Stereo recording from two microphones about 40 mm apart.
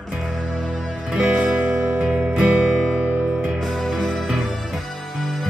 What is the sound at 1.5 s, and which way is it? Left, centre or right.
Music, right.